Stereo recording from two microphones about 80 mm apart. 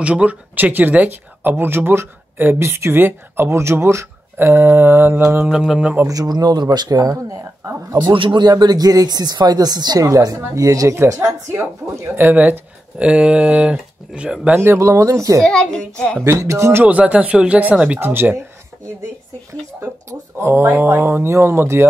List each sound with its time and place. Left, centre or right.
0.0 s speech: centre
5.5 s speech: centre
6.0 s speech: right
8.0 s a man's voice: right
8.5 s speech: right; by 14.6 s centre
14.6 s speech: right
15.4 s a child's voice: centre
16.2 s speech: right
16.8 s speech: centre
20.1 s speech: right